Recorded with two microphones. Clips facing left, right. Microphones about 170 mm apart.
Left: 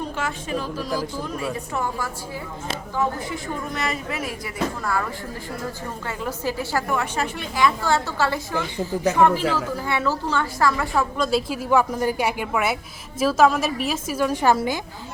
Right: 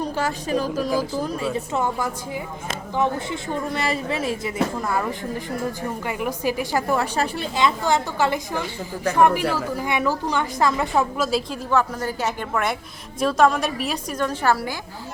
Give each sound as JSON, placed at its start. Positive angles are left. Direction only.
{"t": 0.2, "sound": "a woman's voice", "side_deg": -40}
{"t": 1.5, "sound": "speech", "side_deg": -20}
{"t": 6.1, "sound": "a woman's voice", "side_deg": -15}
{"t": 6.8, "sound": "a woman's voice", "side_deg": -35}
{"t": 11.2, "sound": "a woman's voice", "side_deg": 0}
{"t": 14.5, "sound": "a woman's voice", "side_deg": 20}